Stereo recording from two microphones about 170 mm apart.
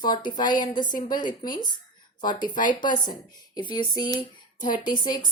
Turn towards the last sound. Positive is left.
turn(degrees=25)  # may be behind; listen again after turning